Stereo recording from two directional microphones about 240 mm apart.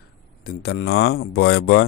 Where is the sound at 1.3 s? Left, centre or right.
Left.